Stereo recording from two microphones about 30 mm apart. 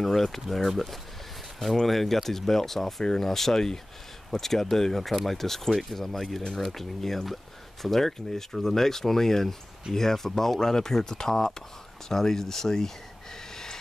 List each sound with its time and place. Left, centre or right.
0.5 s speech: centre
3.0 s speech: left
3.3 s speech: centre